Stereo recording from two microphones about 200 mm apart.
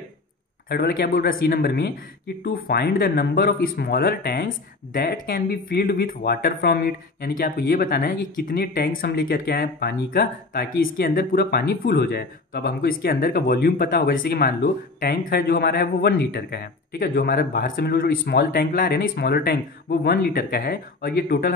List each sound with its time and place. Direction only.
0.7 s speech: 50° left (ahead or behind)